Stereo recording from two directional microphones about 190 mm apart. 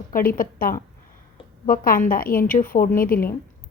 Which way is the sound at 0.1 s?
50° left (ahead or behind).